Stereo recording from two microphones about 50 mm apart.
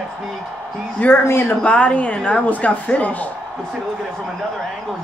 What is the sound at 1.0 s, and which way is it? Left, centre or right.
Speech, left.